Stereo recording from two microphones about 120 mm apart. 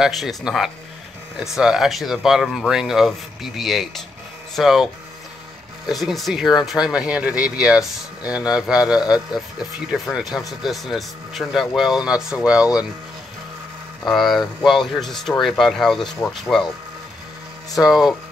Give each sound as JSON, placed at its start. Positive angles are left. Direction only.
{"t": 0.0, "sound": "speech", "side_deg": 0}
{"t": 5.9, "sound": "speech", "side_deg": 0}
{"t": 14.0, "sound": "speech", "side_deg": 0}
{"t": 17.7, "sound": "speech", "side_deg": -5}